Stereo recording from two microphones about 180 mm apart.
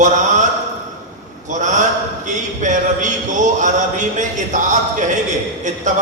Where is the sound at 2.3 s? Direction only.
45° right (ahead or behind).